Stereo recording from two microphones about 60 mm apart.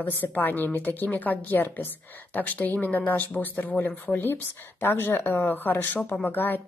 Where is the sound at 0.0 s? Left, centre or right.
Left.